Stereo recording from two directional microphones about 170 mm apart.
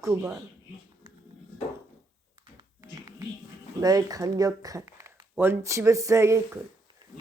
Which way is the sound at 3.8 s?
20° right (ahead or behind).